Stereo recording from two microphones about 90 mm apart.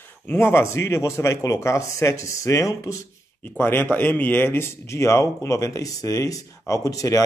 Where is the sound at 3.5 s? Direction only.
25° left (ahead or behind).